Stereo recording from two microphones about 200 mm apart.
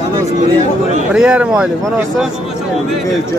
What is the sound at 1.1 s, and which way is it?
Speech, 5° right (ahead or behind).